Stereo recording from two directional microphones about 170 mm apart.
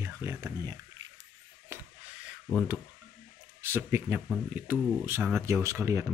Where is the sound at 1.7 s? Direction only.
15° right (ahead or behind).